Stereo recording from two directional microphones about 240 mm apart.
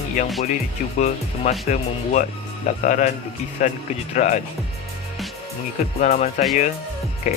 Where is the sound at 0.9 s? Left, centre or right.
Left.